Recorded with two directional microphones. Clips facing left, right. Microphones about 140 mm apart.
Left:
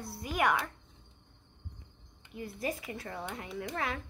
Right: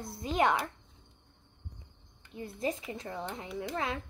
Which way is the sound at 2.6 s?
20° right (ahead or behind).